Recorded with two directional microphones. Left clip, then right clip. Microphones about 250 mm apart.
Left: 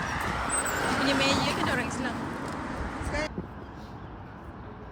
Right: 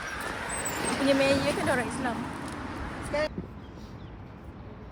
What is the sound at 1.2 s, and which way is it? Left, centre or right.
Vehicle, right.